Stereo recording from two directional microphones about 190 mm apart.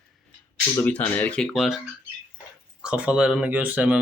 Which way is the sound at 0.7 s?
10° left (ahead or behind).